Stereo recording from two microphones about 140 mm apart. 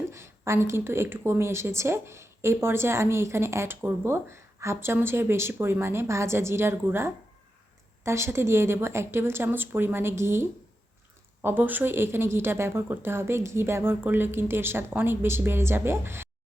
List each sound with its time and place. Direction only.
0.1 s a woman's voice: 20° right (ahead or behind)
11.4 s a woman's voice: 15° right (ahead or behind)